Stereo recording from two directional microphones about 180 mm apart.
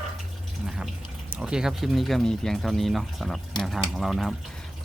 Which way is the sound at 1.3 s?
5° right (ahead or behind).